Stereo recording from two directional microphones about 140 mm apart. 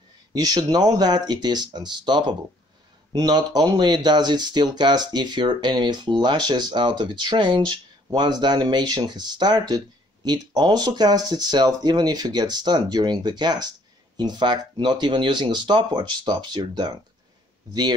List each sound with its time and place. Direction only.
0.3 s speech: 30° right (ahead or behind)